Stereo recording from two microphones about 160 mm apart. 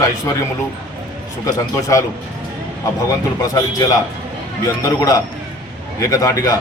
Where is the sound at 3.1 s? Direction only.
20° left (ahead or behind).